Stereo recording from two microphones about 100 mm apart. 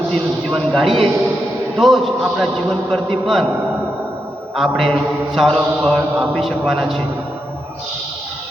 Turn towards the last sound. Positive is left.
turn(degrees=0)  # may be behind; listen again after turning